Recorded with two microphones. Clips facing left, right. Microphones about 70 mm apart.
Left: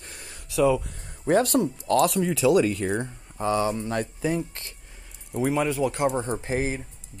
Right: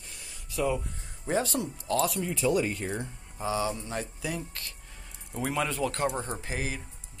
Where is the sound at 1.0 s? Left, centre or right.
Left.